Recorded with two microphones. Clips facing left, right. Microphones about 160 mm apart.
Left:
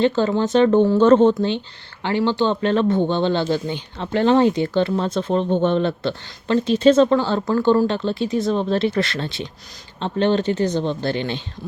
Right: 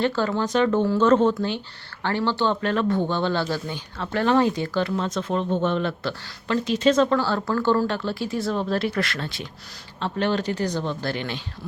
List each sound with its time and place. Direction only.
0.0 s speech: 20° left (ahead or behind)